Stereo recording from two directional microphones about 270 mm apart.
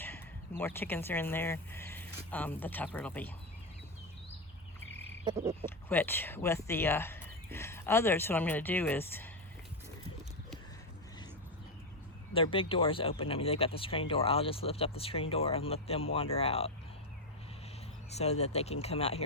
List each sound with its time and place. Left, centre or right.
0.6 s speech: centre
5.6 s speech: centre
12.3 s speech: centre
18.1 s speech: left